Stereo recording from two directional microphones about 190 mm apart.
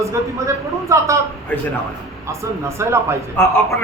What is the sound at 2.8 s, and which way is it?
Speech, 15° right (ahead or behind).